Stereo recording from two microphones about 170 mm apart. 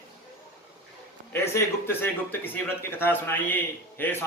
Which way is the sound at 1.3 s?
15° left (ahead or behind).